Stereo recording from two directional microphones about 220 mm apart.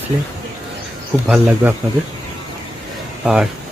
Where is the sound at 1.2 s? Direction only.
5° right (ahead or behind).